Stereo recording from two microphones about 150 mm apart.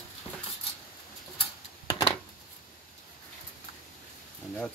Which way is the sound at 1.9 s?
35° left (ahead or behind).